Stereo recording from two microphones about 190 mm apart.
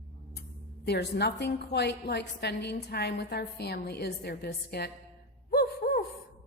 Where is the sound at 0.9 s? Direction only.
60° left (ahead or behind).